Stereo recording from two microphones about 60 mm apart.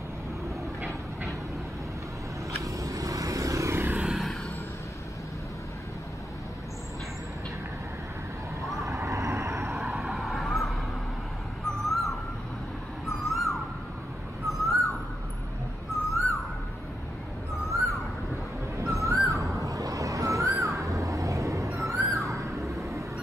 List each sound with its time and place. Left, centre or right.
2.6 s vehicle: right
3.7 s vehicle: right
8.8 s vehicle: right
9.8 s vehicle: centre
11.8 s owl: centre
14.5 s bird: centre
16.1 s owl: centre
17.6 s a sound: centre
18.8 s bird: right
19.2 s a sound: right
22.2 s vehicle: right